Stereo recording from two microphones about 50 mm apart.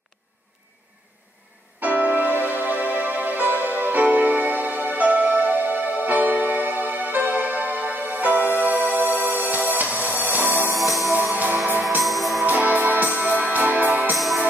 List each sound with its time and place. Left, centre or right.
1.8 s music: right
10.8 s music: centre
12.4 s music: right
14.1 s music: centre